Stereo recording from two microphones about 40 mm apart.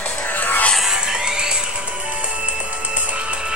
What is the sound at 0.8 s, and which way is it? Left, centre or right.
Music, centre.